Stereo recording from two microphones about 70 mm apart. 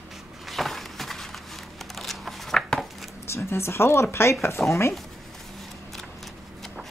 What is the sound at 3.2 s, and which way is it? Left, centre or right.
A woman's voice, left.